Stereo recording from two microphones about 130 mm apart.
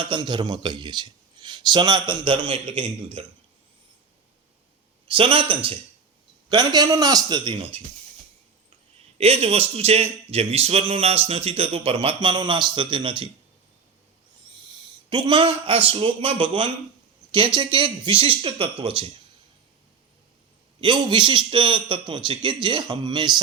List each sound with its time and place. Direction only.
0.0 s a man's voice: 35° right (ahead or behind)
5.0 s a man's voice: 45° right (ahead or behind)
6.5 s a man's voice: 35° right (ahead or behind)
9.1 s a man's voice: 50° right (ahead or behind)
15.1 s a man's voice: 40° right (ahead or behind)
20.8 s a man's voice: 40° right (ahead or behind)